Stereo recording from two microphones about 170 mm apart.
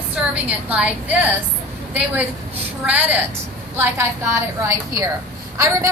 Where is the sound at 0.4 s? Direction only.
10° right (ahead or behind).